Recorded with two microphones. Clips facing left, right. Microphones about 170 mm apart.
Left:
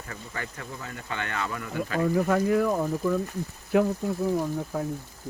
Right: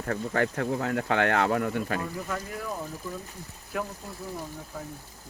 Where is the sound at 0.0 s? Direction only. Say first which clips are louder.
Right 10 dB; 60° right (ahead or behind).